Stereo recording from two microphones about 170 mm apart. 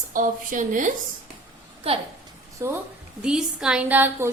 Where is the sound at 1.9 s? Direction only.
35° right (ahead or behind).